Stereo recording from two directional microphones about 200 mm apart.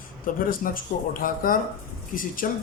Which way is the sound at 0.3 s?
45° left (ahead or behind).